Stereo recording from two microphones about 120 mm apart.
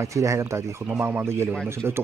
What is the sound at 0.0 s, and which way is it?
Speech, 25° right (ahead or behind).